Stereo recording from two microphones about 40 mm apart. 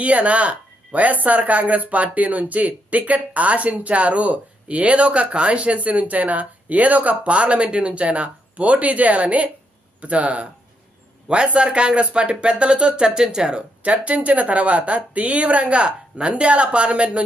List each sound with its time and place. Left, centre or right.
0.0 s speech: right
13.8 s speech: right